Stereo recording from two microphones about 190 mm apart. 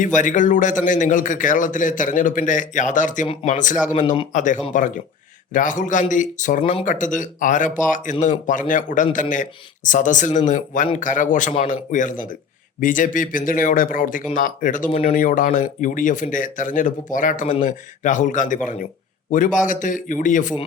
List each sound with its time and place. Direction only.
0.0 s speech: 40° left (ahead or behind)